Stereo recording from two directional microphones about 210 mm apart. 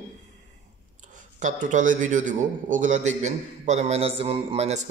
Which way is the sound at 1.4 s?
35° right (ahead or behind).